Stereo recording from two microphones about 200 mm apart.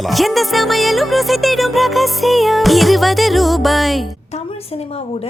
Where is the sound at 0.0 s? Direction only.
Centre (ahead or behind).